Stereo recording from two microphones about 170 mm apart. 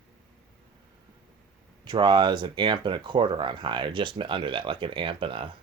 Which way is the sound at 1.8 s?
25° right (ahead or behind).